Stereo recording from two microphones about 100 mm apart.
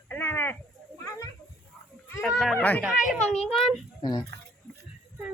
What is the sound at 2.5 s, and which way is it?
Speech, 15° left (ahead or behind).